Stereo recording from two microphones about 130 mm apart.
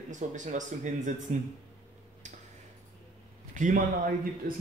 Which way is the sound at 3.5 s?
80° right.